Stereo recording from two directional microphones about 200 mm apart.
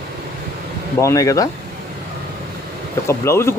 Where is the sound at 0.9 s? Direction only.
15° left (ahead or behind).